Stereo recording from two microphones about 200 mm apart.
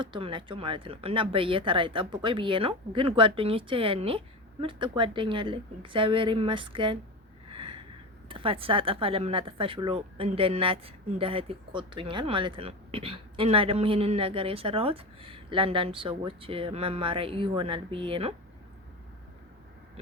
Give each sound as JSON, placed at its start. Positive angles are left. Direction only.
{"t": 0.0, "sound": "speech", "side_deg": -25}
{"t": 7.5, "sound": "a sound", "side_deg": -25}
{"t": 8.3, "sound": "speech", "side_deg": -25}